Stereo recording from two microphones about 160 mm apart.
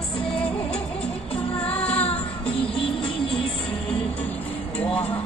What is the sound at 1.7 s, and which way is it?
Music, 10° left (ahead or behind).